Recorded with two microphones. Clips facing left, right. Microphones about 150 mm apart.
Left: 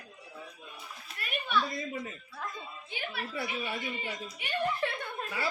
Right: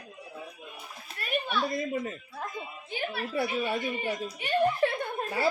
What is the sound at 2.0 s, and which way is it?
A child's voice, 40° right (ahead or behind).